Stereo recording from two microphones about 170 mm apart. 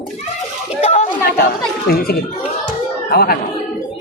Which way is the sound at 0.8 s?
45° left (ahead or behind).